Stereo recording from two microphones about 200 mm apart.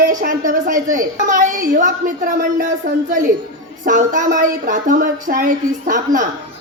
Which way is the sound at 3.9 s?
40° right (ahead or behind).